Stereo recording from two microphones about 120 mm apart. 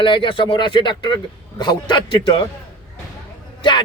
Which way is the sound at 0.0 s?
45° left (ahead or behind).